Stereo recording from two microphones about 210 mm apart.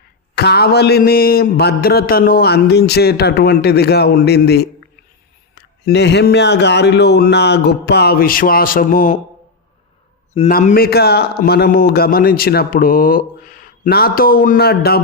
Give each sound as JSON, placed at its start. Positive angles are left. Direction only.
{"t": 0.3, "sound": "mantra", "side_deg": 50}
{"t": 10.5, "sound": "a man's voice", "side_deg": 40}
{"t": 10.8, "sound": "mantra", "side_deg": 50}